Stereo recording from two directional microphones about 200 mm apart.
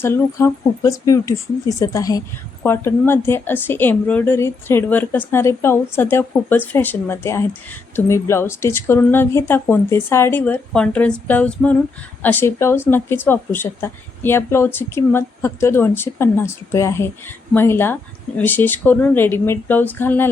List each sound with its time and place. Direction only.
0.0 s a woman's voice: 10° left (ahead or behind)